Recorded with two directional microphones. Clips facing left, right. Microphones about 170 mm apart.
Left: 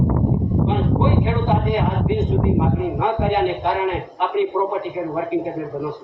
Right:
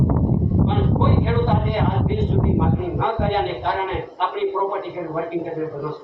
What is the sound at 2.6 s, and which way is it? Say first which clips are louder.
Speech: left 1 dB; 15° left (ahead or behind).